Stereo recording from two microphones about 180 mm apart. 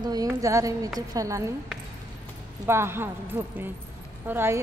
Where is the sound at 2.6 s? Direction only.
15° right (ahead or behind).